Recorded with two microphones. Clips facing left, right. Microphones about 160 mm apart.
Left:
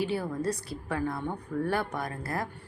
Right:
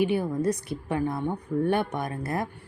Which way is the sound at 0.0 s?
20° right (ahead or behind).